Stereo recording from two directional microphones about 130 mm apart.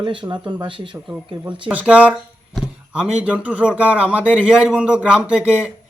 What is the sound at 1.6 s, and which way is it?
Speech, 10° right (ahead or behind).